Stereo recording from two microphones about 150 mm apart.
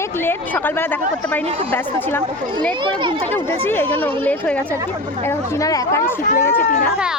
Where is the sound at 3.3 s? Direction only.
15° left (ahead or behind).